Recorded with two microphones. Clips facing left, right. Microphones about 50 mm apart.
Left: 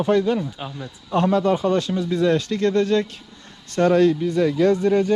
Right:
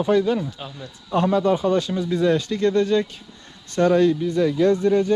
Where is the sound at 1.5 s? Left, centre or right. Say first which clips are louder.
Even; left.